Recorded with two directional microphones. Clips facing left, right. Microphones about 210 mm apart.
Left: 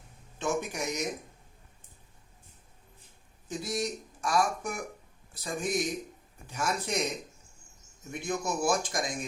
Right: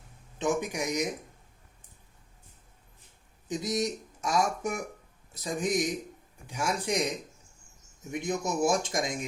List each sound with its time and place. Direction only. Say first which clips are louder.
0.3 s speech: right 2 dB; 15° right (ahead or behind)
3.5 s speech: right 3 dB; 20° right (ahead or behind)
8.1 s speech: right 2 dB; 15° right (ahead or behind)